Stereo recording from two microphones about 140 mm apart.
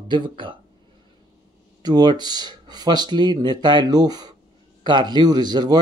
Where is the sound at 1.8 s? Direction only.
30° right (ahead or behind).